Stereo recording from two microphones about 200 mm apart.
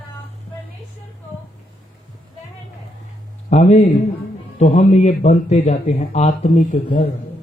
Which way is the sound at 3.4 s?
35° left (ahead or behind).